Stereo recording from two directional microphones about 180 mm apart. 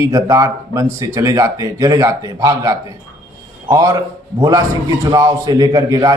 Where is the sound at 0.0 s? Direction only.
15° right (ahead or behind).